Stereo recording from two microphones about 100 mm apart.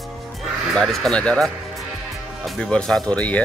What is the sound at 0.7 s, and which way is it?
Speech, centre (ahead or behind).